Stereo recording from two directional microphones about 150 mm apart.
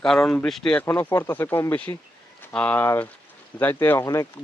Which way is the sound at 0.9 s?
15° left (ahead or behind).